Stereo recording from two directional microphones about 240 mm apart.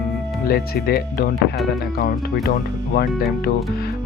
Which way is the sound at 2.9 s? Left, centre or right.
Left.